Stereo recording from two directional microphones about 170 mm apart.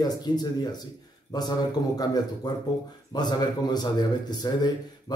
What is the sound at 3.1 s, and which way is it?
Speech, 25° left (ahead or behind).